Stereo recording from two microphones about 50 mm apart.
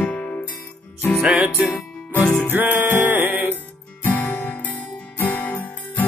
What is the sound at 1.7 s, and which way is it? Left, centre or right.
Music, left.